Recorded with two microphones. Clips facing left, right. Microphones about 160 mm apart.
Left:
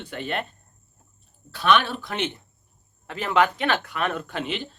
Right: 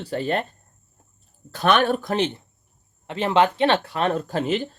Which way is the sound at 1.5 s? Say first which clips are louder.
Right 2 dB; 45° right (ahead or behind).